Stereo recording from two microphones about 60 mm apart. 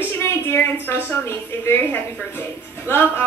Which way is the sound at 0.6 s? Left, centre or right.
Left.